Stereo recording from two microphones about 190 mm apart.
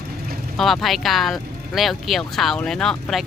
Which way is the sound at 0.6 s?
Centre (ahead or behind).